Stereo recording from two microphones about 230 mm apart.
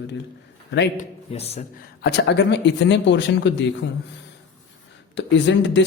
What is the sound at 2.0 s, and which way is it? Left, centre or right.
Speech, left.